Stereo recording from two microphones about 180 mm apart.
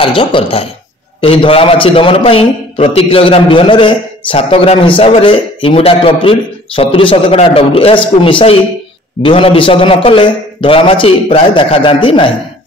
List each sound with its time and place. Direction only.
0.0 s a man's voice: 30° left (ahead or behind)